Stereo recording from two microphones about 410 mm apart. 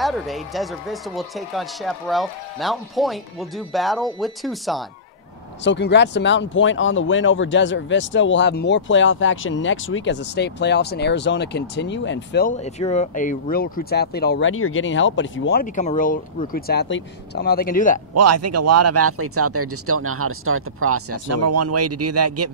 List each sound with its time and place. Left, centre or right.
0.0 s speech: centre
5.6 s speech: left
18.1 s speech: right